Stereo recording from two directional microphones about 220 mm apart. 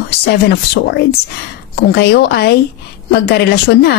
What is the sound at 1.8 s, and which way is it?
Speech, 50° left (ahead or behind).